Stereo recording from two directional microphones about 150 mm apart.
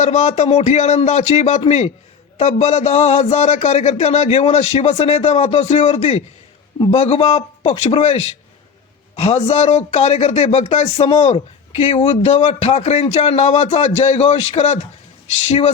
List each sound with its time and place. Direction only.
0.0 s a man's voice: 50° left (ahead or behind)